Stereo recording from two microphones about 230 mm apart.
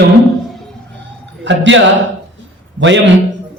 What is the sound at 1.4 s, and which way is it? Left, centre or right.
Speech, right.